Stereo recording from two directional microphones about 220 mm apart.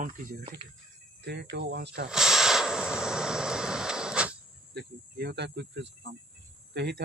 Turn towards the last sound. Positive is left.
turn(degrees=-50)  # may be behind; listen again after turning